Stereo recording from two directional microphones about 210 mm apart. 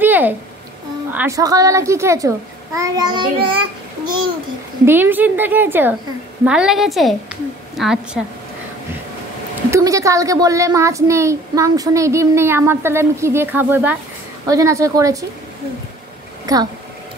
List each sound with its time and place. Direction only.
0.0 s a sound: 10° right (ahead or behind)
1.1 s a woman's voice: 15° right (ahead or behind)
4.8 s a woman's voice: 10° right (ahead or behind)
9.7 s a woman's voice: 15° right (ahead or behind)
16.5 s a woman's voice: 15° right (ahead or behind)